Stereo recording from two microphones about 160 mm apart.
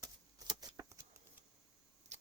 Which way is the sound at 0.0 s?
25° right (ahead or behind).